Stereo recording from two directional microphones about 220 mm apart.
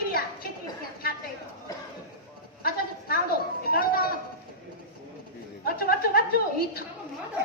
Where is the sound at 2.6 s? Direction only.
45° left (ahead or behind).